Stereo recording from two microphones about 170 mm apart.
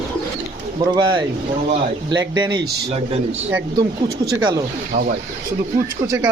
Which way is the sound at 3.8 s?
20° right (ahead or behind).